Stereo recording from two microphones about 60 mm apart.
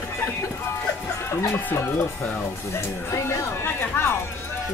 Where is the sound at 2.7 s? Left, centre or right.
Left.